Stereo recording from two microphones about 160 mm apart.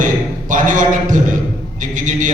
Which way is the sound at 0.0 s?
55° right (ahead or behind).